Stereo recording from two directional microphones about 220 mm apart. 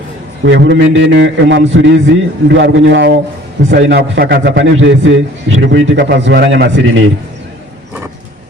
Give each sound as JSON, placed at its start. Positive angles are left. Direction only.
{"t": 0.4, "sound": "a man's voice", "side_deg": -55}